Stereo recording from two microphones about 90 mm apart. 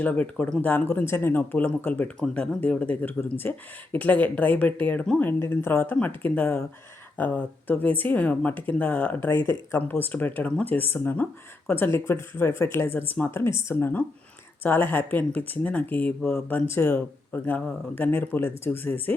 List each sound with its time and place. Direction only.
0.0 s speech: 20° left (ahead or behind)
5.2 s speech: 20° left (ahead or behind)